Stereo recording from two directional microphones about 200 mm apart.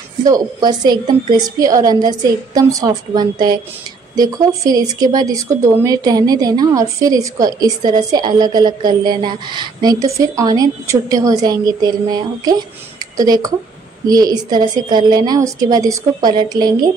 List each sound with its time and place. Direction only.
0.2 s speech: 20° right (ahead or behind)